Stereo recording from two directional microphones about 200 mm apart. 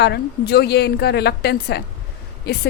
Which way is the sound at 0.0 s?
55° left (ahead or behind).